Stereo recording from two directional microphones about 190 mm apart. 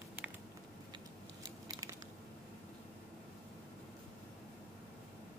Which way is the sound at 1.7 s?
15° right (ahead or behind).